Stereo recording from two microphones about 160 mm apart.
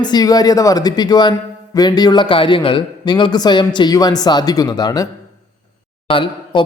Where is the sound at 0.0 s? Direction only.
25° left (ahead or behind).